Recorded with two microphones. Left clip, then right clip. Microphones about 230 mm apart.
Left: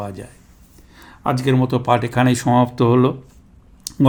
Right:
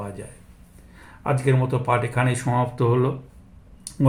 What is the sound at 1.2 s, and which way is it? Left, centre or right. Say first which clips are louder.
Speech: left 4 dB; left.